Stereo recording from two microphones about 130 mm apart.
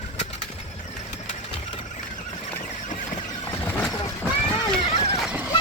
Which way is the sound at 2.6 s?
85° left.